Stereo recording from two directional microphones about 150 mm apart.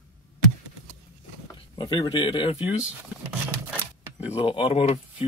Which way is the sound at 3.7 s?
10° right (ahead or behind).